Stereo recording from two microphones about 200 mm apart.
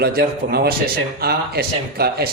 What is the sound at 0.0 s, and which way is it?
A man's voice, 50° right (ahead or behind).